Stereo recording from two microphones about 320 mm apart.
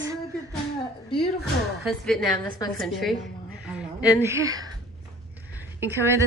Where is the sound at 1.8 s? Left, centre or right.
Centre.